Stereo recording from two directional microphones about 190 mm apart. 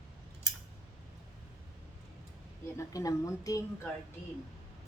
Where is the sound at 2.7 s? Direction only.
15° left (ahead or behind).